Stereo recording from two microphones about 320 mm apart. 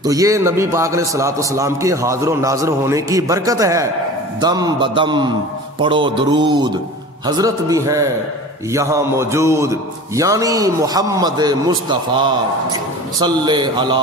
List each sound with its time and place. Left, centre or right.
0.0 s a man's voice: centre